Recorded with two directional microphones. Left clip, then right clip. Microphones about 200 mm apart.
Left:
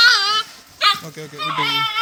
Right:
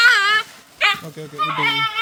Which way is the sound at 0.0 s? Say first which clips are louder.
Even; 30° right (ahead or behind).